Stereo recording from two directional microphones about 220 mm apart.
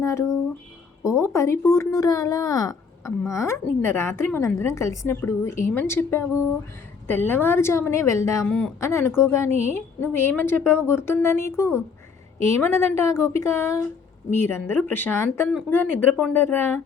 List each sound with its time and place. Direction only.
0.0 s speech: 15° left (ahead or behind)
9.5 s a woman's voice: 30° right (ahead or behind)
10.0 s speech: 10° left (ahead or behind)